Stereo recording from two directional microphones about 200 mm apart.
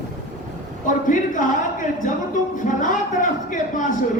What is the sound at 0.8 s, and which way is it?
A woman's voice, 40° left (ahead or behind).